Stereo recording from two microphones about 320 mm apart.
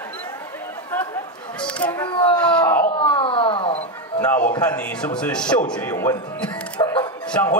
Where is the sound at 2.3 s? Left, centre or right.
Centre.